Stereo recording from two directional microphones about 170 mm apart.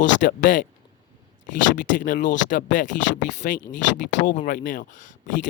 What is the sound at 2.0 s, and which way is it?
Speech, 50° left (ahead or behind).